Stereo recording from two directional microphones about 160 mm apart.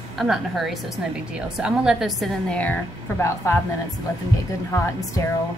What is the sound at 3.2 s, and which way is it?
Speech, 15° left (ahead or behind).